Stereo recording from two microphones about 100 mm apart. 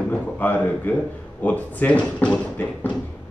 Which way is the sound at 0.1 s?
15° left (ahead or behind).